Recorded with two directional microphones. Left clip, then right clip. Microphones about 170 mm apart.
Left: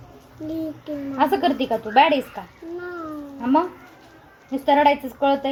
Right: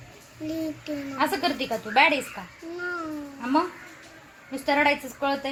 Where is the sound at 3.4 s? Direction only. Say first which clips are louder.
Left 5 dB; 20° left (ahead or behind).